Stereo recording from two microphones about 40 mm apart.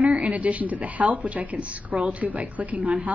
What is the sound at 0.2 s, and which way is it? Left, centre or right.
A woman's voice, right.